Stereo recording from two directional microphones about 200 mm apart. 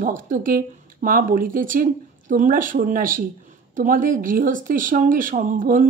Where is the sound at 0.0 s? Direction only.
40° right (ahead or behind).